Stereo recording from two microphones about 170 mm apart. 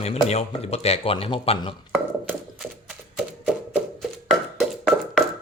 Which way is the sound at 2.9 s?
5° right (ahead or behind).